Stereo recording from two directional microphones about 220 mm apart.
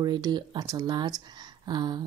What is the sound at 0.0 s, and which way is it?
Speech, 20° right (ahead or behind).